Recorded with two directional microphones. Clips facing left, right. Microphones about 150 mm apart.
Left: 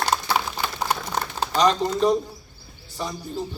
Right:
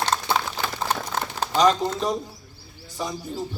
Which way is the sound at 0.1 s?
15° left (ahead or behind).